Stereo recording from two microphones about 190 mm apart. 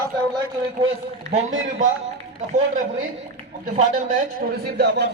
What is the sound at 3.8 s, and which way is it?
Speech, 40° right (ahead or behind).